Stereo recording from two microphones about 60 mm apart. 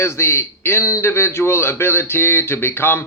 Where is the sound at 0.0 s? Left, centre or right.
Left.